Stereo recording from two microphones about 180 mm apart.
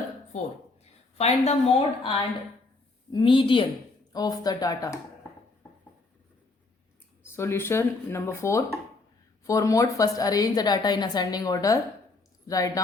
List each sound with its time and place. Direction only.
0.3 s a woman's voice: 40° left (ahead or behind); by 4.9 s 20° left (ahead or behind)
7.3 s a woman's voice: 15° left (ahead or behind)